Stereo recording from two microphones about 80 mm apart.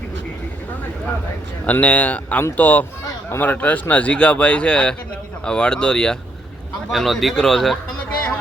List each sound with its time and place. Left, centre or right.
1.6 s speech: centre
6.9 s speech: centre